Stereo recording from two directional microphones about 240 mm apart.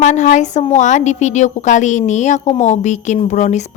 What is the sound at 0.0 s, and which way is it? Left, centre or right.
A woman's voice, left.